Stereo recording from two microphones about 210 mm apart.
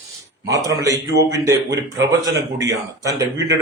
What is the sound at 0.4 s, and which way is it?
A man's voice, 15° right (ahead or behind).